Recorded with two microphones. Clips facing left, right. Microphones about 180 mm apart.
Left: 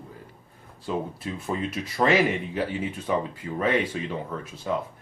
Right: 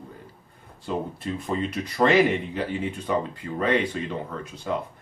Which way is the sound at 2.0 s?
10° right (ahead or behind).